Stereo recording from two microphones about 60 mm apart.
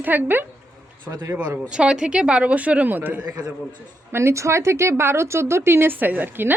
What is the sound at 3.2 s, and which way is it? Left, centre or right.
Speech, right.